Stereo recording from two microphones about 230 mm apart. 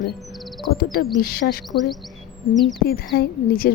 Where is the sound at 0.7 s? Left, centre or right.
Left.